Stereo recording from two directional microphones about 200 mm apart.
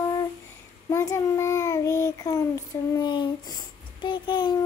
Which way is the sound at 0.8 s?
15° left (ahead or behind).